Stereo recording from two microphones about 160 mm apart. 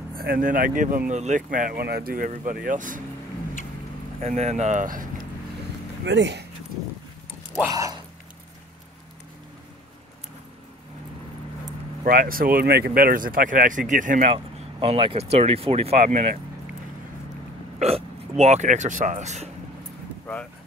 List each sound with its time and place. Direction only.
0.1 s speech: 70° right (ahead or behind)
1.1 s speech: 50° right (ahead or behind)
4.2 s speech: 45° right (ahead or behind)
6.0 s speech: 90° right
7.6 s speech: 20° right (ahead or behind)
12.0 s speech: 60° right (ahead or behind)
14.3 s speech: 35° right (ahead or behind)
17.7 s speech: 40° right (ahead or behind)